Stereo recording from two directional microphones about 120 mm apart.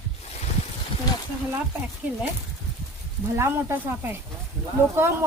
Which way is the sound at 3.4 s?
20° right (ahead or behind).